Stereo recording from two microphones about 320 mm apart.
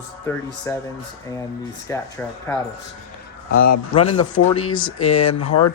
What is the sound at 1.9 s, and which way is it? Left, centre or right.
Speech, centre.